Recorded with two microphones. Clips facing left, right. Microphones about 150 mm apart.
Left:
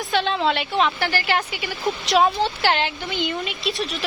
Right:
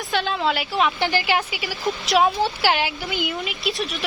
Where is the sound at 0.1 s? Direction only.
Centre (ahead or behind).